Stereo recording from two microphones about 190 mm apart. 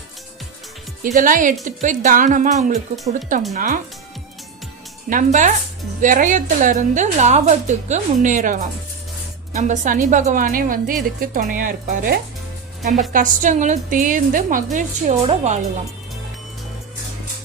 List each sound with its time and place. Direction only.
1.0 s a woman's voice: 45° right (ahead or behind)
5.0 s a woman's voice: 45° right (ahead or behind)